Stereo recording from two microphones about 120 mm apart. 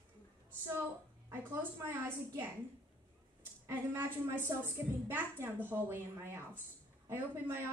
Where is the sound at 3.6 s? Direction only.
20° right (ahead or behind).